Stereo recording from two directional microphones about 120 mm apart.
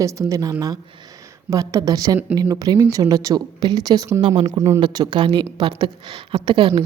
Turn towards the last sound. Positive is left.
turn(degrees=-40)  # may be behind; listen again after turning